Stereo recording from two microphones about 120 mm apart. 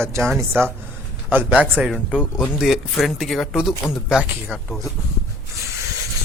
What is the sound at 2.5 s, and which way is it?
Speech, 5° right (ahead or behind).